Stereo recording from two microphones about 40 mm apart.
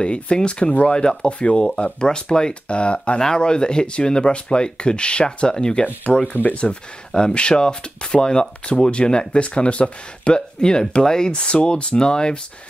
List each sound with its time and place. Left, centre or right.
0.0 s speech: left
3.2 s speech: centre
6.1 s speech: centre
6.5 s speech: left